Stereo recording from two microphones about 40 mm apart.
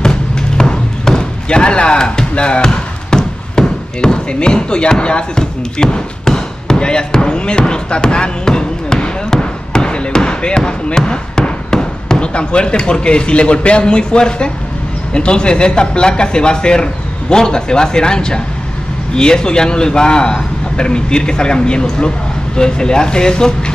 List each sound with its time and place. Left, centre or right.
0.0 s music: centre
15.1 s speech: left